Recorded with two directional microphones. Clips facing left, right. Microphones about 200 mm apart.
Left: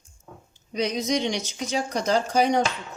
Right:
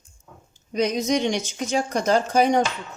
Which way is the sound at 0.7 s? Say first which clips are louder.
Right 3 dB; 50° right (ahead or behind).